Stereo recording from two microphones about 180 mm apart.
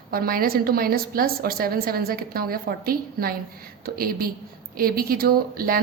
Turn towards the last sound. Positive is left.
turn(degrees=-55)  # may be behind; listen again after turning